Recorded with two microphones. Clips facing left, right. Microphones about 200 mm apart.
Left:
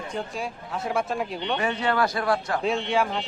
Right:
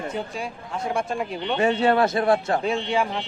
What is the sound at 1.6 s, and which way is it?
A man's voice, 25° right (ahead or behind).